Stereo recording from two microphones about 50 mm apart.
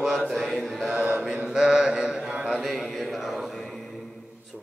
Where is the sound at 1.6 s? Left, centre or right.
Centre.